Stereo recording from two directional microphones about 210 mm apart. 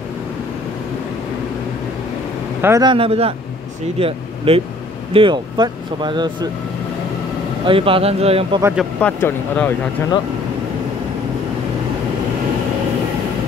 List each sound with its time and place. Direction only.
2.6 s speech: 15° right (ahead or behind)
7.6 s speech: 25° right (ahead or behind)
8.7 s speech: 5° left (ahead or behind)